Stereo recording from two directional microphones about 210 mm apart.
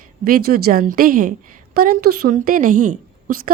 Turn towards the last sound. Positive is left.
turn(degrees=-40)  # may be behind; listen again after turning